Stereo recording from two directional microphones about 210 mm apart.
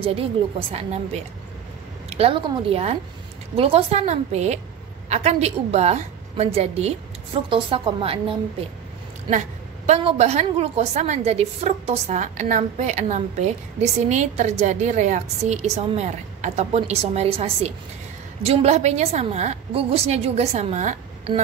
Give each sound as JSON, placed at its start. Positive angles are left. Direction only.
{"t": 0.0, "sound": "a woman's voice", "side_deg": -25}
{"t": 9.8, "sound": "a woman's voice", "side_deg": -30}